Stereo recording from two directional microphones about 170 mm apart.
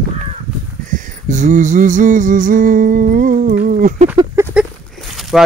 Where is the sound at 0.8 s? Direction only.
50° right (ahead or behind).